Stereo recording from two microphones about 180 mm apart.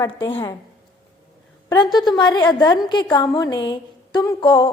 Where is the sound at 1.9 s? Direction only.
25° left (ahead or behind).